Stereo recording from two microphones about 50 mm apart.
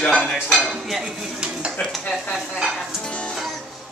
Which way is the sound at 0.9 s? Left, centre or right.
Centre.